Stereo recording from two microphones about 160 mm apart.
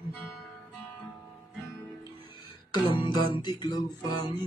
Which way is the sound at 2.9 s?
30° left (ahead or behind).